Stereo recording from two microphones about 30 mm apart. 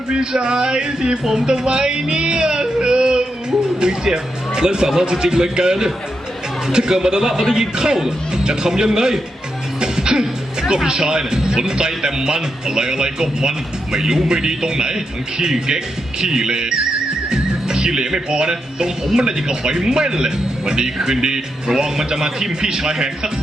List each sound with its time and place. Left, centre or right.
0.1 s speech: right
9.8 s music: right
10.8 s speech: right
17.2 s music: right
19.1 s speech: right